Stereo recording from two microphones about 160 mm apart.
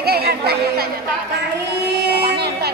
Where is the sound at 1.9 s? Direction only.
90° right.